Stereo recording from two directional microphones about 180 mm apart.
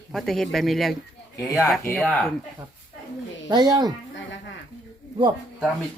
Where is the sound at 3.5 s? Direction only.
25° right (ahead or behind).